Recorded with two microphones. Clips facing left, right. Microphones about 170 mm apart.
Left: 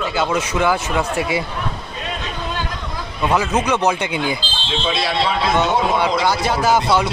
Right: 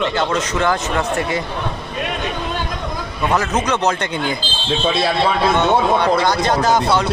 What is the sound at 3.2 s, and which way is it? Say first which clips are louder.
Speech: left 1 dB; 10° left (ahead or behind).